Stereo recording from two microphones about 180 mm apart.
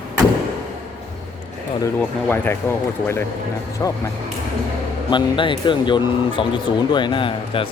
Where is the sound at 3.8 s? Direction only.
20° left (ahead or behind).